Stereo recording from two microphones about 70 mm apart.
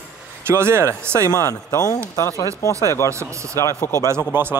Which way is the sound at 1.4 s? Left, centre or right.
Left.